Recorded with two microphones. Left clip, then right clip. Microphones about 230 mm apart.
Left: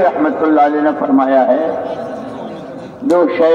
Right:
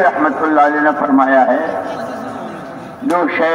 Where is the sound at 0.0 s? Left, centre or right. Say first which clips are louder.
Even; right.